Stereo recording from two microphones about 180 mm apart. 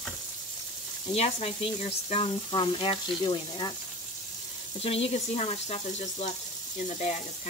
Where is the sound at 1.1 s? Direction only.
35° left (ahead or behind).